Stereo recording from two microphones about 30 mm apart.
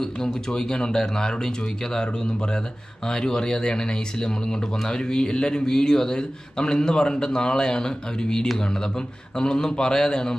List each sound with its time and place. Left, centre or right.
0.5 s speech: left
3.1 s speech: left